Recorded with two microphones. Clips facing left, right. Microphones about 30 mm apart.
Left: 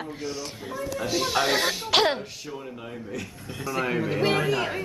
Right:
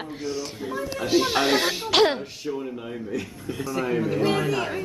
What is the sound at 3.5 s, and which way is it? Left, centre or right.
Speech, centre.